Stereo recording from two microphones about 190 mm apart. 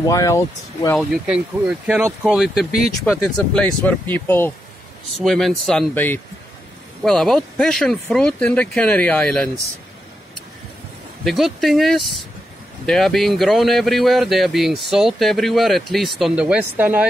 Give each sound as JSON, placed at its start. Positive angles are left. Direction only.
{"t": 0.0, "sound": "speech", "side_deg": 15}
{"t": 0.9, "sound": "speech", "side_deg": -5}
{"t": 11.2, "sound": "speech", "side_deg": 0}